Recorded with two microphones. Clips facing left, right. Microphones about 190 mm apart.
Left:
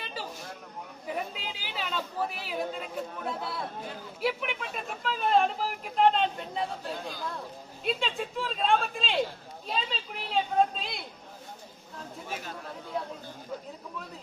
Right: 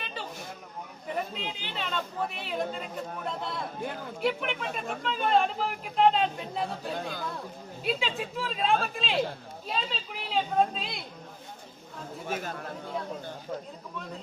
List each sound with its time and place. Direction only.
0.0 s a sound: 5° left (ahead or behind)
1.0 s speech: 5° left (ahead or behind)
3.8 s speech: 60° right (ahead or behind)
4.2 s speech: 5° left (ahead or behind)
6.9 s speech: 55° right (ahead or behind)
7.9 s speech: centre (ahead or behind)
12.3 s speech: 50° right (ahead or behind)